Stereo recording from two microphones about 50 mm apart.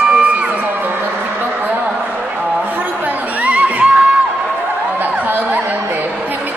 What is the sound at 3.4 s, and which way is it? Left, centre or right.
Crowd, right.